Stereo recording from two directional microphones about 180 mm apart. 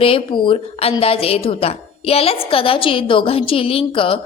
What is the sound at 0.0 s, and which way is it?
A woman's voice, 30° left (ahead or behind).